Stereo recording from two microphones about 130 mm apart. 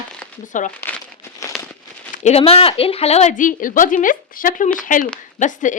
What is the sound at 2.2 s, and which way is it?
A woman's voice, 50° left (ahead or behind).